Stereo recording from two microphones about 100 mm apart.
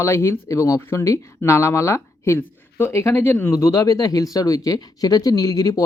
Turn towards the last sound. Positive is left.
turn(degrees=35)  # may be behind; listen again after turning